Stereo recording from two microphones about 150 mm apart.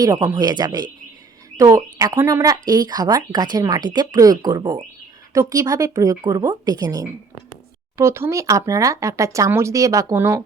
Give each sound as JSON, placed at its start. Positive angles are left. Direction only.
{"t": 0.0, "sound": "speech", "side_deg": -25}